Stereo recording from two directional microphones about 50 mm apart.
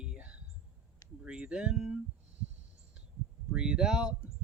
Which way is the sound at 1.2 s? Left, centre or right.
Centre.